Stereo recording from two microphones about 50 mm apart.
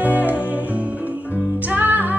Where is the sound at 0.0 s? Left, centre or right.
Right.